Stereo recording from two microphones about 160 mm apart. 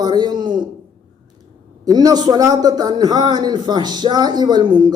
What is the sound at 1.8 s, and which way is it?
A man's voice, 25° right (ahead or behind).